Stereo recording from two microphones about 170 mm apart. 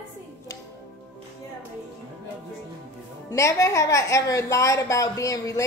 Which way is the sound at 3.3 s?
20° left (ahead or behind).